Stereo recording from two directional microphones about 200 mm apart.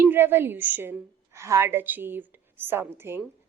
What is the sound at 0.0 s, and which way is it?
A woman's voice, 10° right (ahead or behind).